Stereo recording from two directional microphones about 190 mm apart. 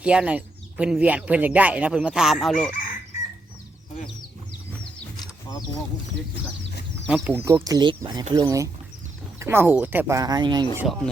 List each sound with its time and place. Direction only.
0.0 s speech: 5° right (ahead or behind)
5.2 s a sound: 20° left (ahead or behind)
7.1 s speech: 10° right (ahead or behind)